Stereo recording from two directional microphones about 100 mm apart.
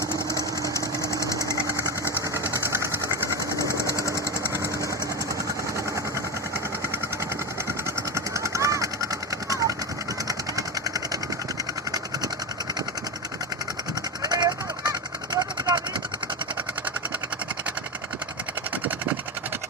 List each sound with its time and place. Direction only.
0.7 s engine: 30° left (ahead or behind)
2.6 s vehicle: 25° right (ahead or behind)
3.7 s sewing machine: 30° left (ahead or behind)
8.1 s vehicle: 30° right (ahead or behind)
14.2 s vehicle: 40° right (ahead or behind)